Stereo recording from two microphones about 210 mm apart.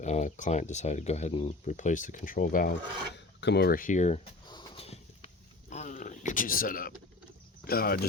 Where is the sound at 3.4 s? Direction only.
55° left (ahead or behind).